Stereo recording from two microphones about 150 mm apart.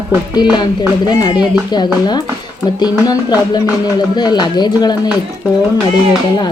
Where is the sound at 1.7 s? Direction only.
30° left (ahead or behind).